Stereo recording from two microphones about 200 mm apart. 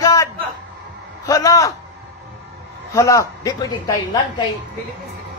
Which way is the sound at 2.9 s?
15° left (ahead or behind).